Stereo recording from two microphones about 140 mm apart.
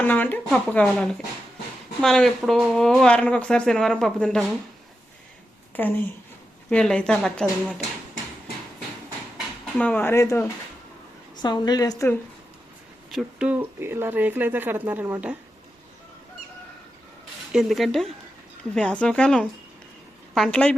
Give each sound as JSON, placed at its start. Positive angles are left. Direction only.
{"t": 0.0, "sound": "speech", "side_deg": 15}
{"t": 5.7, "sound": "speech", "side_deg": 15}
{"t": 9.7, "sound": "speech", "side_deg": 10}
{"t": 11.4, "sound": "a woman's voice", "side_deg": 30}
{"t": 13.1, "sound": "speech", "side_deg": -5}
{"t": 17.5, "sound": "speech", "side_deg": 0}